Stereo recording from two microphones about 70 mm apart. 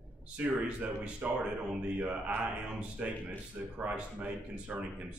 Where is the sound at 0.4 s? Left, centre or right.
Right.